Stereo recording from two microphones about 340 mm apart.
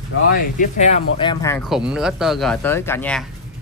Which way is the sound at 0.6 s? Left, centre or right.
Left.